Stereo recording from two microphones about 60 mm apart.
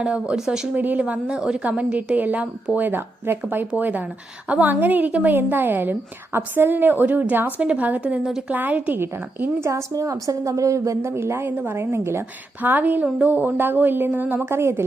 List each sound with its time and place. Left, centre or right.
0.0 s speech: centre
0.7 s a woman's voice: right
1.4 s speech: centre
1.6 s a woman's voice: right
8.2 s speech: centre
8.5 s a woman's voice: right
9.6 s speech: right
9.9 s a woman's voice: right
12.6 s a woman's voice: right